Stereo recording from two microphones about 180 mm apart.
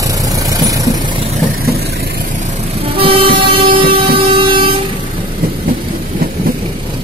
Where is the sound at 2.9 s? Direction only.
30° right (ahead or behind).